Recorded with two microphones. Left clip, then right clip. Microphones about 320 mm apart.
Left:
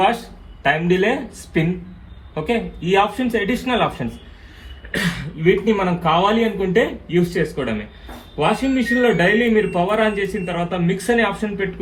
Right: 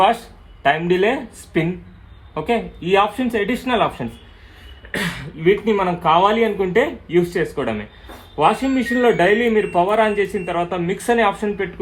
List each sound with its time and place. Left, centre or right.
0.6 s a man's voice: right